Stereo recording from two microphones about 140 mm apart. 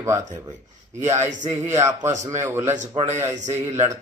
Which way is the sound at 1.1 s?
55° right (ahead or behind).